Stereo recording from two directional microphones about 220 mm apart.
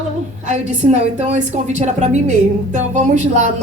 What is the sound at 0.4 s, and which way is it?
A woman's voice, 35° right (ahead or behind).